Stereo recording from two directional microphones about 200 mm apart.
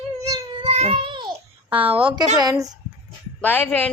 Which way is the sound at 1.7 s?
25° right (ahead or behind).